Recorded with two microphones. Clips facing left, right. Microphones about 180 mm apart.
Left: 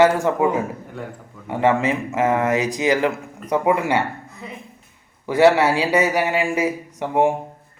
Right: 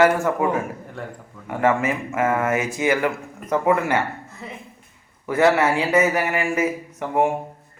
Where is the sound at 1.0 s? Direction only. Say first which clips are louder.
Left 1 dB; centre (ahead or behind).